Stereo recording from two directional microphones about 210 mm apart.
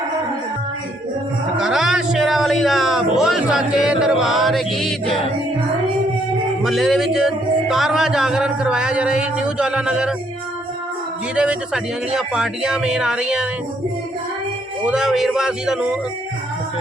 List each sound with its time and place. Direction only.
1.5 s a sound: 5° right (ahead or behind)
6.6 s speech: centre (ahead or behind)
11.3 s speech: 5° right (ahead or behind)
14.8 s speech: 5° right (ahead or behind)